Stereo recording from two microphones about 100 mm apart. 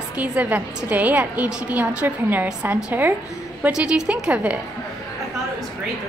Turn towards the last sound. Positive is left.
turn(degrees=-10)  # may be behind; listen again after turning